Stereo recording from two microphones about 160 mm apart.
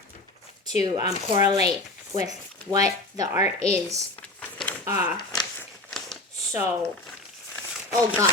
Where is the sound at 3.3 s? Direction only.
45° left (ahead or behind).